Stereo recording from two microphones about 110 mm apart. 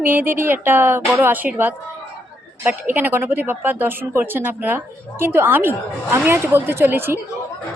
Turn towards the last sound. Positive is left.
turn(degrees=-20)  # may be behind; listen again after turning